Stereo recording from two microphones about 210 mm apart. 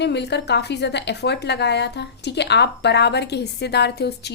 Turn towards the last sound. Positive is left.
turn(degrees=50)  # may be behind; listen again after turning